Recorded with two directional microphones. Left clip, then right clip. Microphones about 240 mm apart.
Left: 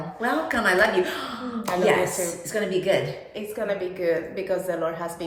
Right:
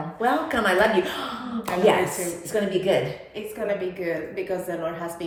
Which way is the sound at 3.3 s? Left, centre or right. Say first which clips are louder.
Even; centre.